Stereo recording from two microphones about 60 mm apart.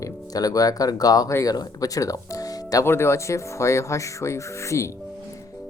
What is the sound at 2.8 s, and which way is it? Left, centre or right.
Rub, left.